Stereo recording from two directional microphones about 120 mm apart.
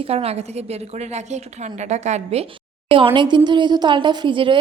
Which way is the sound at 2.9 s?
45° right (ahead or behind).